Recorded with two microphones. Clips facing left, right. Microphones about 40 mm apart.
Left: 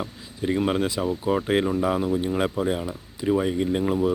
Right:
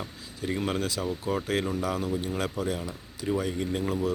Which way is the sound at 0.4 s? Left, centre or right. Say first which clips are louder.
Left 6 dB; left.